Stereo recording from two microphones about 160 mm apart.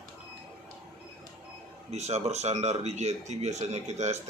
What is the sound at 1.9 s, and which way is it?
Speech, 45° right (ahead or behind).